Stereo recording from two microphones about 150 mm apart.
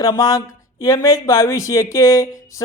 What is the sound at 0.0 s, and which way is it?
Speech, 20° left (ahead or behind).